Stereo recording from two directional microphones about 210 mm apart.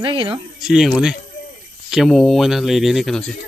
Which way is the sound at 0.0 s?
25° right (ahead or behind).